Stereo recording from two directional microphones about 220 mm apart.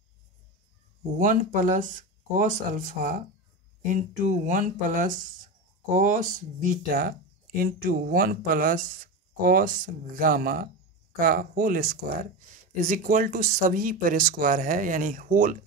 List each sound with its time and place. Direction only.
1.1 s speech: 35° right (ahead or behind)